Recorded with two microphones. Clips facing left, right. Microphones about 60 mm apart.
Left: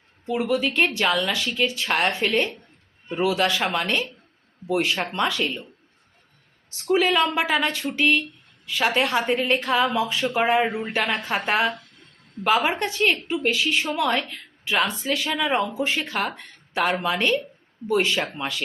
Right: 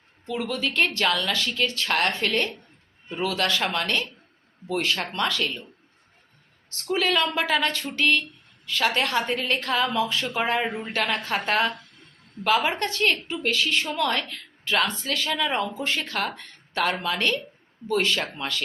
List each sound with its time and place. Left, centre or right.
0.3 s a woman's voice: centre
6.7 s a woman's voice: centre